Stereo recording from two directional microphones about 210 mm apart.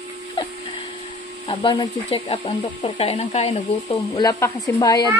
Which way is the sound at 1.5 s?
25° left (ahead or behind).